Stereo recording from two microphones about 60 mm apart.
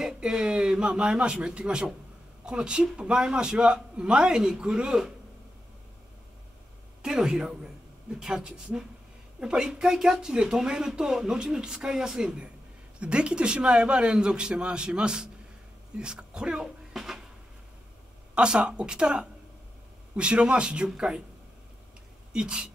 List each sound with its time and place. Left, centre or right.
0.0 s speech: centre
7.0 s a woman's voice: centre
18.3 s speech: centre
22.3 s speech: centre